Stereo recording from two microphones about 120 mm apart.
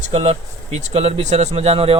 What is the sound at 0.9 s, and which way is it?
Speech, 65° right (ahead or behind).